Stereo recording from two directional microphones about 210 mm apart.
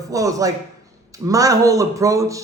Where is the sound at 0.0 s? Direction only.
15° right (ahead or behind).